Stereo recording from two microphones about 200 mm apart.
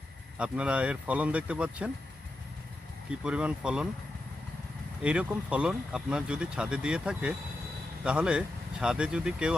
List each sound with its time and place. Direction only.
0.3 s speech: 5° right (ahead or behind)
3.2 s speech: 5° right (ahead or behind)
5.0 s speech: 5° right (ahead or behind)